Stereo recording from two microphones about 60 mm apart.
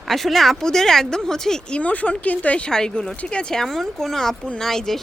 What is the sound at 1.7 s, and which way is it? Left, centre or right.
Speech, left.